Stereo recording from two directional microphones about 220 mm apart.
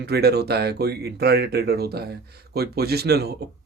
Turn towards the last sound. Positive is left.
turn(degrees=-45)  # may be behind; listen again after turning